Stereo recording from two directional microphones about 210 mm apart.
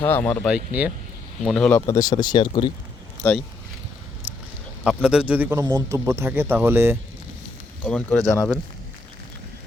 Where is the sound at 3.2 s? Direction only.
10° left (ahead or behind).